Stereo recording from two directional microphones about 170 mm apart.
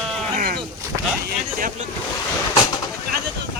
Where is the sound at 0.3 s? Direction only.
60° right (ahead or behind).